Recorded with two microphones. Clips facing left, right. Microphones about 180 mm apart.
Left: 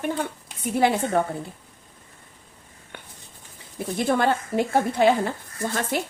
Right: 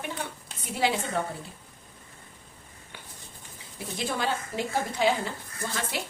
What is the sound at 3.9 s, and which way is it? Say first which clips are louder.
Speech: left 8 dB; 55° left (ahead or behind).